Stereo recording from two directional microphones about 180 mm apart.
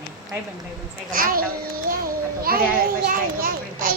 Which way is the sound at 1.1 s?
50° right (ahead or behind).